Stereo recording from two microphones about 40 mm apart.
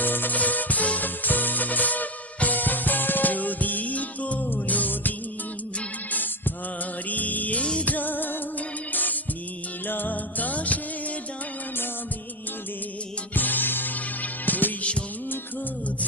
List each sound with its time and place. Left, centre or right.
0.0 s music: left
13.3 s music: left